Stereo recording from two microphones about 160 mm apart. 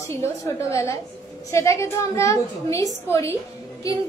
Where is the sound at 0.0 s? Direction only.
20° left (ahead or behind).